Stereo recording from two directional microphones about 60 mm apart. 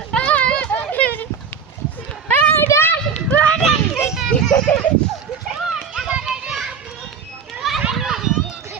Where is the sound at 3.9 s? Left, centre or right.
Left.